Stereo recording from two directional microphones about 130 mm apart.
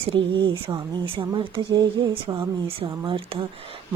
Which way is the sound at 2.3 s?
40° right (ahead or behind).